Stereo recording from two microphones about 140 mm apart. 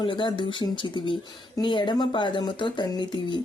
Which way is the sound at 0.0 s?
35° left (ahead or behind).